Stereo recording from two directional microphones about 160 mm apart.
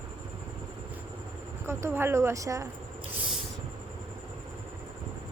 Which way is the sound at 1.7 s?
15° right (ahead or behind).